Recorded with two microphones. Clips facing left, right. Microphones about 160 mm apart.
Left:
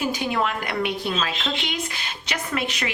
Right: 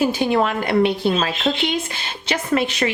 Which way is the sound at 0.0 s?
30° right (ahead or behind).